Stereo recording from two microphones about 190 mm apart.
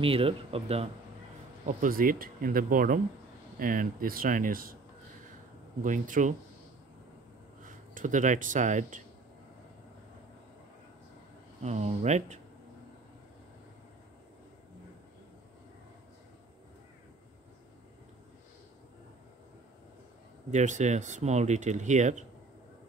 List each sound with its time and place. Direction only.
0.0 s speech: 30° right (ahead or behind)
1.7 s speech: 45° right (ahead or behind)
5.8 s speech: 45° right (ahead or behind)
7.6 s speech: 45° right (ahead or behind)
11.6 s speech: 35° right (ahead or behind)
20.5 s speech: 40° right (ahead or behind)